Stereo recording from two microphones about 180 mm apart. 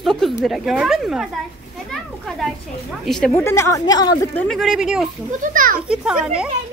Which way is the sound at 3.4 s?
15° left (ahead or behind).